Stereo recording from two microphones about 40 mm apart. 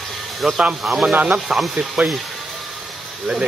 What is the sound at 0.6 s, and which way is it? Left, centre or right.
Speech, right.